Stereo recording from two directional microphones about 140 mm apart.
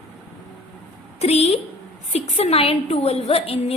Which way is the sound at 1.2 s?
50° left (ahead or behind).